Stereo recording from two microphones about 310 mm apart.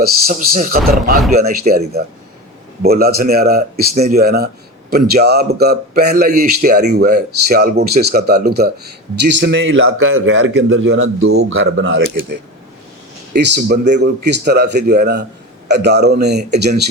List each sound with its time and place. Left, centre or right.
0.0 s speech: right
2.8 s a man's voice: right